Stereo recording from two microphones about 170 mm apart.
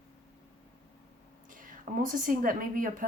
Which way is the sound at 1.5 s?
55° right (ahead or behind).